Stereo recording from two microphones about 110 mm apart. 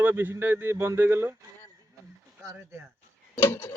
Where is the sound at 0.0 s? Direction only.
20° right (ahead or behind).